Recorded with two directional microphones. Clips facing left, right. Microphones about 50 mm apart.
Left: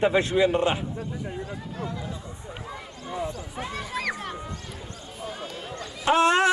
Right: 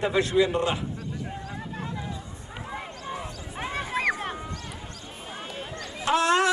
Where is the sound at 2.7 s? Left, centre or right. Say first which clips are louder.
Right 4 dB; right.